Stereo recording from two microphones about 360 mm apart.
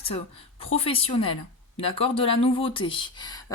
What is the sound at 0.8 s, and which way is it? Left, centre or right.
Speech, centre.